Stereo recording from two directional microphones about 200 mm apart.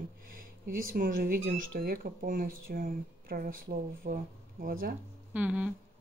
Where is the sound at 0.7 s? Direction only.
45° right (ahead or behind).